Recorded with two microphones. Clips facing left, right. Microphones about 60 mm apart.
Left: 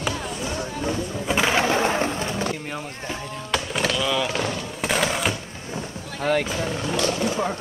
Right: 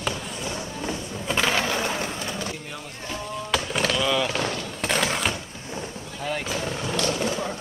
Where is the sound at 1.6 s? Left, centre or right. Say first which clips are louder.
Left 5 dB; left.